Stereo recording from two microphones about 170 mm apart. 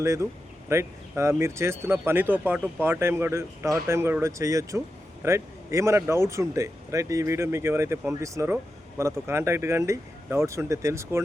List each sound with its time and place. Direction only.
0.0 s speech: 15° right (ahead or behind)